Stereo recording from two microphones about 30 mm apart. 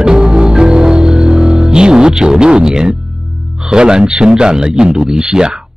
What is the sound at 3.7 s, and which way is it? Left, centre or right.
Speech, right.